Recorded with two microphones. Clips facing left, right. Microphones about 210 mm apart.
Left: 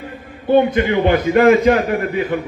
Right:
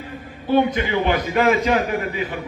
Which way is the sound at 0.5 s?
55° left (ahead or behind).